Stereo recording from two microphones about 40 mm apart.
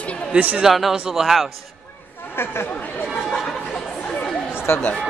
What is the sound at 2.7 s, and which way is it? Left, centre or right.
Speech, left.